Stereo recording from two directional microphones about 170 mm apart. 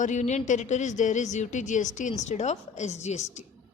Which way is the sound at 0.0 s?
45° left (ahead or behind).